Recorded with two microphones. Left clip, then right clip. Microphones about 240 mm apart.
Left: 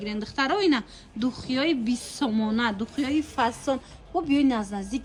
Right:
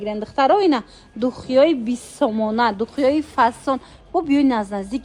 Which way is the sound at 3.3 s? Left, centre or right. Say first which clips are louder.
Right 7 dB; right.